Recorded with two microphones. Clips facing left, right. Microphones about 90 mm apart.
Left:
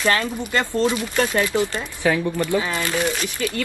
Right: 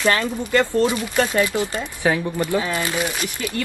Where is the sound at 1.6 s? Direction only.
20° right (ahead or behind).